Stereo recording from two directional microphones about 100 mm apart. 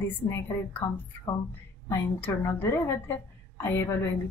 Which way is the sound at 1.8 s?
20° left (ahead or behind).